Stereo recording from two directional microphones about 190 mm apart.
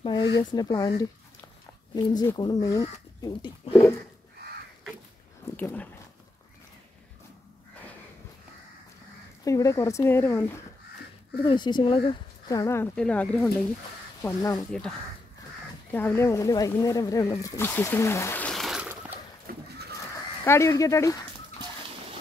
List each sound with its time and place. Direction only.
0.0 s speech: 25° left (ahead or behind)
5.6 s speech: 10° left (ahead or behind)
9.4 s speech: 15° left (ahead or behind)
11.4 s speech: 25° left (ahead or behind); by 13.5 s 5° left (ahead or behind)
14.2 s speech: 20° left (ahead or behind)
14.7 s speech: 5° left (ahead or behind)
19.5 s a sound: 50° right (ahead or behind)
20.4 s speech: 15° left (ahead or behind)